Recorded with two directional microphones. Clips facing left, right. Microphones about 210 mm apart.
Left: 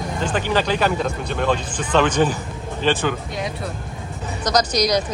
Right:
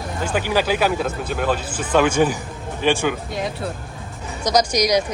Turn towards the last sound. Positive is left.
turn(degrees=-10)  # may be behind; listen again after turning